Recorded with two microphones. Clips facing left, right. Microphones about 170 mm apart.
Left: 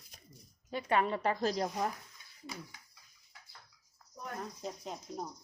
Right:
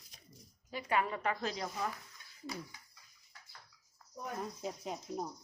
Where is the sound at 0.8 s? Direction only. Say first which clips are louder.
Left 3 dB; 25° left (ahead or behind).